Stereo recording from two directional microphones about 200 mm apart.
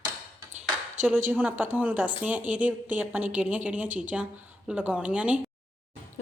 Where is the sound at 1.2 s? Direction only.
10° right (ahead or behind).